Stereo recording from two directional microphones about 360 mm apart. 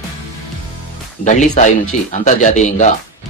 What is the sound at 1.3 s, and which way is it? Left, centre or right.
Speech, centre.